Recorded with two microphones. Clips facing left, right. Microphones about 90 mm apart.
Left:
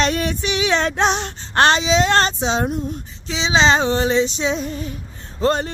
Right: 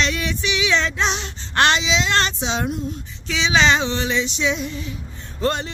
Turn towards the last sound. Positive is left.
turn(degrees=35)  # may be behind; listen again after turning